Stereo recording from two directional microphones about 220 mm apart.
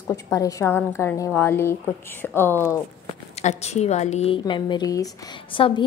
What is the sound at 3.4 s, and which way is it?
A woman's voice, 30° left (ahead or behind).